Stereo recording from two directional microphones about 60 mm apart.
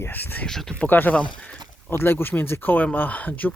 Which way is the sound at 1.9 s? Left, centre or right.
Left.